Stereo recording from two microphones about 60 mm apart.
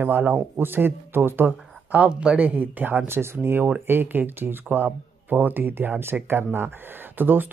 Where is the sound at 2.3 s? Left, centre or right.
Right.